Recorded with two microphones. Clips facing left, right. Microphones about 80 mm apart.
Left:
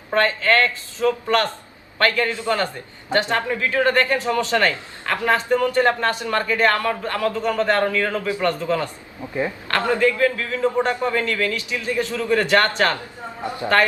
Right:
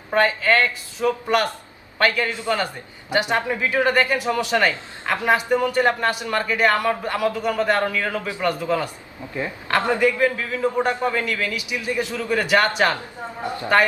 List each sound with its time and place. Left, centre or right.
0.1 s speech: centre
9.2 s speech: left
9.6 s speech: centre
13.4 s speech: left